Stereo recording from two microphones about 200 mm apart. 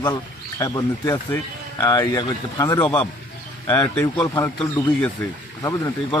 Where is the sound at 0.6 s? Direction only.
15° left (ahead or behind).